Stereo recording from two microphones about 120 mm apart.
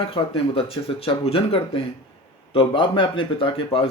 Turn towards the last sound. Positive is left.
turn(degrees=50)  # may be behind; listen again after turning